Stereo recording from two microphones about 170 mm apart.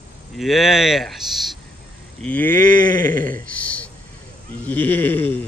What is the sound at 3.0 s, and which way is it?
Speech, 55° right (ahead or behind).